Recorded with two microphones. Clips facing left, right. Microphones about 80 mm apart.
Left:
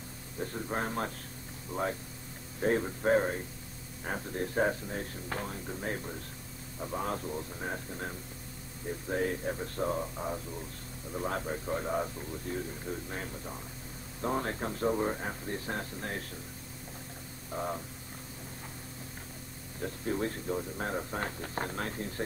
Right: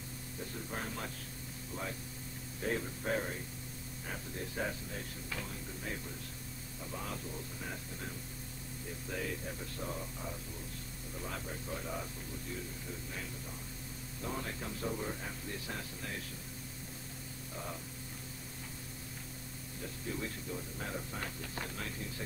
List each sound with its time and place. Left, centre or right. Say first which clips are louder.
0.4 s speech: left 8 dB; left
2.6 s speech: left 8 dB; left
9.1 s speech: left 9 dB; left
14.2 s speech: left 8 dB; left
17.5 s speech: left 9 dB; left
19.8 s speech: left 8 dB; left